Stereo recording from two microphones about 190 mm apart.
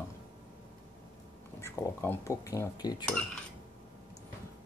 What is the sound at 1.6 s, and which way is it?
Speech, 15° left (ahead or behind).